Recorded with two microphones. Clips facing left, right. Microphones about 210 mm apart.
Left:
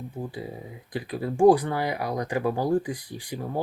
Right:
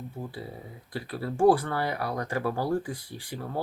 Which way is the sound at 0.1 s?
15° left (ahead or behind).